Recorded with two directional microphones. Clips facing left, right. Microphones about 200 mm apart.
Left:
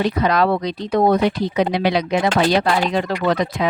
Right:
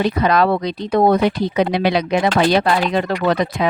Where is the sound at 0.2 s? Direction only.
60° right (ahead or behind).